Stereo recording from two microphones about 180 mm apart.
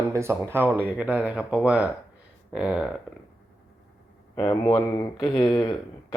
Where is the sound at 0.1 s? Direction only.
15° right (ahead or behind).